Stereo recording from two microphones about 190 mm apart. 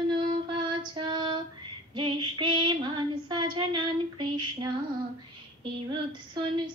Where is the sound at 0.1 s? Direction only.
25° right (ahead or behind).